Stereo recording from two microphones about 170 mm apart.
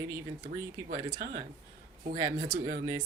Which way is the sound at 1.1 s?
60° right (ahead or behind).